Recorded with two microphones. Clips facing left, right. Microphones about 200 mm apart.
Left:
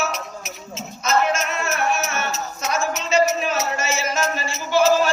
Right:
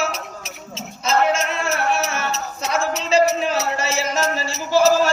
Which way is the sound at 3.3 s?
30° right (ahead or behind).